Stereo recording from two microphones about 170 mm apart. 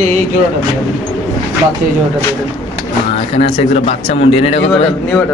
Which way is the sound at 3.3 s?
35° left (ahead or behind).